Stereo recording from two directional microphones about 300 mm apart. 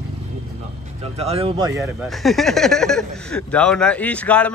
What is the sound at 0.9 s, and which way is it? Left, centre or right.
Speech, right.